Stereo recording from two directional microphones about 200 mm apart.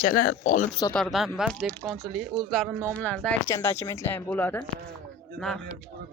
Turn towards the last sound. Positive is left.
turn(degrees=5)  # may be behind; listen again after turning